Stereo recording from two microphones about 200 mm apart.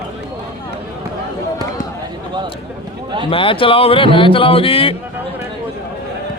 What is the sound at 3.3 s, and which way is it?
Speech, 25° left (ahead or behind).